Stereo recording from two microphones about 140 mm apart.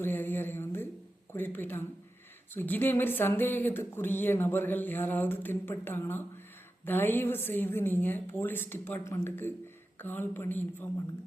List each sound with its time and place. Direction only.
0.0 s speech: 15° left (ahead or behind)